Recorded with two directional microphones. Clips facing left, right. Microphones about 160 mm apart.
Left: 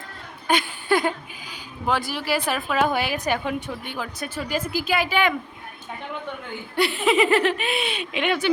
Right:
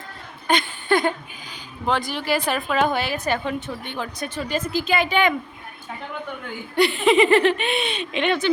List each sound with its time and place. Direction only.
0.4 s a sound: 10° left (ahead or behind)
1.9 s speech: 5° left (ahead or behind)
6.7 s speech: centre (ahead or behind)